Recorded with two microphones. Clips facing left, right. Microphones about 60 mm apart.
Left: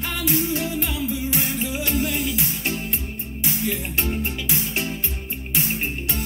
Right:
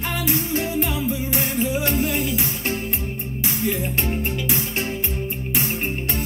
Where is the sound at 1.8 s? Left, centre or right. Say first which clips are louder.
Right 2 dB; right.